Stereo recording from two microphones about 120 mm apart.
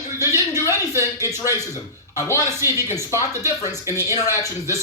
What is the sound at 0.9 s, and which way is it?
Speech, 20° right (ahead or behind).